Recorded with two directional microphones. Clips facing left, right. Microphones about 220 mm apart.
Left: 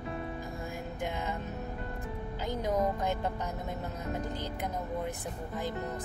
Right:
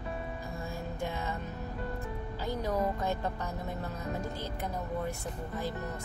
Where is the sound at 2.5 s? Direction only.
15° left (ahead or behind).